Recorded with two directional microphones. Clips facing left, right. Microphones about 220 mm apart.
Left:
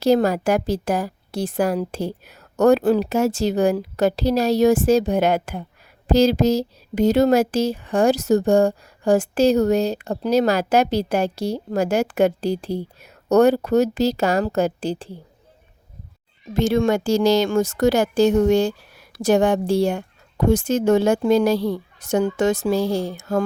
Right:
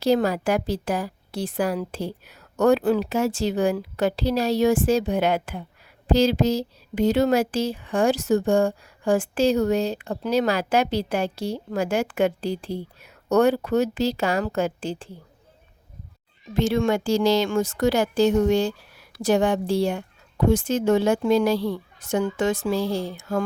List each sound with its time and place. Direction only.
0.0 s a woman's voice: 45° left (ahead or behind)
16.6 s a woman's voice: 45° left (ahead or behind)